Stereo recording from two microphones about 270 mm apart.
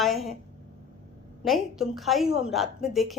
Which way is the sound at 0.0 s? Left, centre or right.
Centre.